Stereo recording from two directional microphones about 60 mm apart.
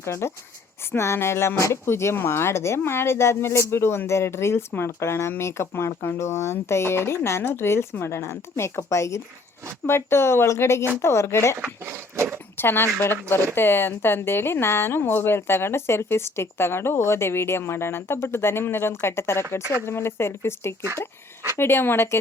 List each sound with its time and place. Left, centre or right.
0.0 s speech: left
11.9 s a sound: right
12.5 s speech: left